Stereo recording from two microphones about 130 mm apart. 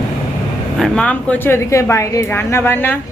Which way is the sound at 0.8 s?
10° left (ahead or behind).